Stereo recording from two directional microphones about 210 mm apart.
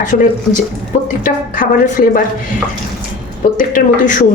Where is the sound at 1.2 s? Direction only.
40° left (ahead or behind).